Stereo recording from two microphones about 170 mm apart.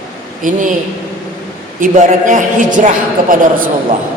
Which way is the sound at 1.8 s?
50° right (ahead or behind).